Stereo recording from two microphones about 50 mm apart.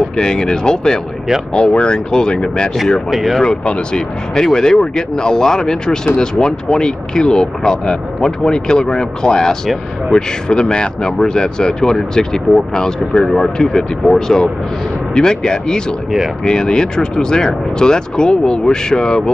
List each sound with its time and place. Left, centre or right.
0.2 s speech: centre
3.1 s speech: centre
3.4 s speech: centre